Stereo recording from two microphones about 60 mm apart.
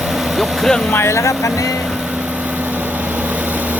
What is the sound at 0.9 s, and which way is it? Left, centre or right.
Speech, left.